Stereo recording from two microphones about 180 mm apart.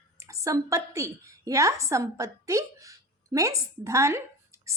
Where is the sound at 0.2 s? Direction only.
15° right (ahead or behind).